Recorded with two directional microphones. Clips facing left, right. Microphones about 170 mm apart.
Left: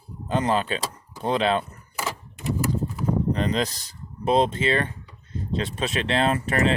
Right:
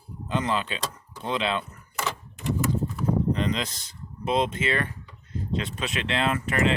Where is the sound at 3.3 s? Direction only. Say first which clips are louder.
Left 2 dB; 40° left (ahead or behind).